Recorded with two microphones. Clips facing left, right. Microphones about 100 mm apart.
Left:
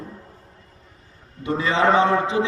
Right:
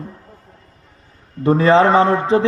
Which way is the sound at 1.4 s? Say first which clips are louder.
Right 11 dB; 45° right (ahead or behind).